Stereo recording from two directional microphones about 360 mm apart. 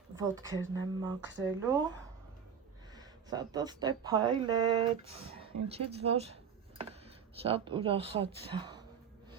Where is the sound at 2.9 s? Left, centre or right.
Centre.